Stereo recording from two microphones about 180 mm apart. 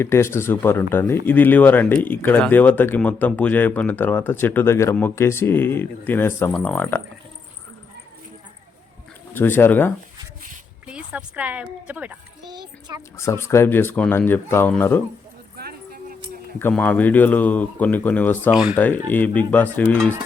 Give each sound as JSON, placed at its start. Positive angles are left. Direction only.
{"t": 0.0, "sound": "speech", "side_deg": 15}
{"t": 9.3, "sound": "speech", "side_deg": 10}
{"t": 10.8, "sound": "speech", "side_deg": -5}
{"t": 12.5, "sound": "a child's voice", "side_deg": -25}
{"t": 13.1, "sound": "speech", "side_deg": 15}
{"t": 15.5, "sound": "keys jangling", "side_deg": -60}
{"t": 16.6, "sound": "speech", "side_deg": 10}
{"t": 18.5, "sound": "speech", "side_deg": -5}
{"t": 19.0, "sound": "speech", "side_deg": 10}